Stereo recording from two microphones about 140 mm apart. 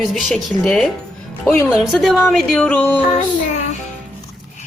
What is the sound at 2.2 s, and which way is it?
Music, 5° left (ahead or behind).